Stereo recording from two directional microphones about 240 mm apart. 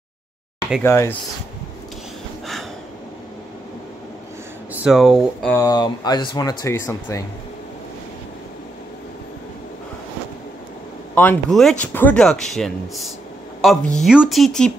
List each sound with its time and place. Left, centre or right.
0.8 s speech: centre
4.7 s speech: centre
5.6 s speech: centre
11.1 s speech: centre